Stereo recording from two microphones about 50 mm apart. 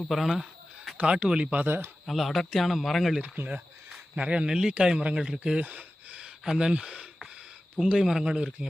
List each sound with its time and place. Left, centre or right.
0.0 s a man's voice: centre
0.9 s a man's voice: right
1.6 s speech: right
2.0 s a man's voice: centre
3.3 s a man's voice: right; by 5.5 s centre
5.5 s a sound: right
6.4 s speech: centre
6.7 s speech: centre